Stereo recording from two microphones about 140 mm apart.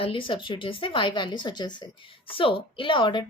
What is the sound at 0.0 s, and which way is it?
A woman's voice, 35° left (ahead or behind).